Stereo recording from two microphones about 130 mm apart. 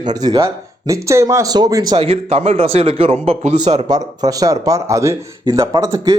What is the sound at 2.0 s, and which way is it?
Speech, 50° right (ahead or behind).